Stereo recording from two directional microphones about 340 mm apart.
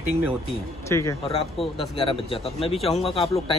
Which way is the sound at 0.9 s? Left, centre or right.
Centre.